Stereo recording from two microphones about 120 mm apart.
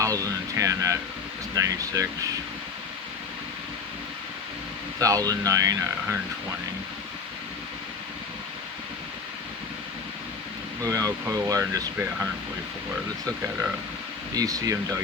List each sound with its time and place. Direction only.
0.0 s speech: 30° right (ahead or behind)
4.9 s speech: 30° right (ahead or behind)
10.8 s speech: 30° right (ahead or behind)
14.3 s speech: 30° right (ahead or behind)